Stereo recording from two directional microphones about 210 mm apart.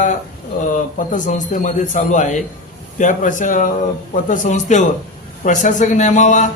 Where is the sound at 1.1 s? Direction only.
35° left (ahead or behind).